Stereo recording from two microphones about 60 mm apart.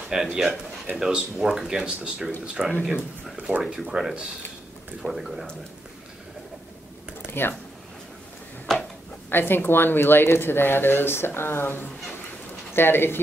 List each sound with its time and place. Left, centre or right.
0.1 s speech: centre
3.4 s speech: right
3.7 s speech: centre
7.4 s speech: left
8.7 s a sound: centre
9.3 s speech: left